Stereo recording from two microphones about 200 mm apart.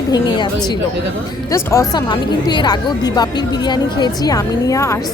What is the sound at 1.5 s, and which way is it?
A woman's voice, 15° left (ahead or behind).